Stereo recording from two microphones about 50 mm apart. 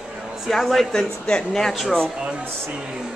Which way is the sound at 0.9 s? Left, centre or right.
Centre.